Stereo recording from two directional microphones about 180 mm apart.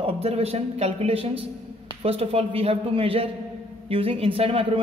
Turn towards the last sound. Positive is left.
turn(degrees=-30)  # may be behind; listen again after turning